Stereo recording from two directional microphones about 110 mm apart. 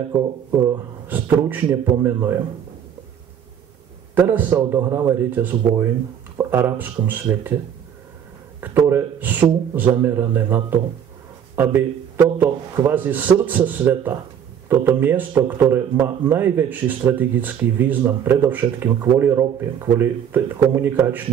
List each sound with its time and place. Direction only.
0.1 s speech: 30° right (ahead or behind)
1.0 s speech: 15° right (ahead or behind)
4.1 s a man's voice: 15° right (ahead or behind)
8.5 s a man's voice: 20° right (ahead or behind)